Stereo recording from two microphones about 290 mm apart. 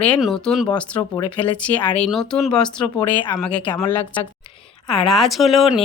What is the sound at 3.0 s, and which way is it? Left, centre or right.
Speech, centre.